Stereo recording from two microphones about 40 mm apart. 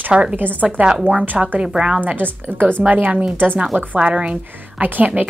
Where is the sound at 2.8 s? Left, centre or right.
Right.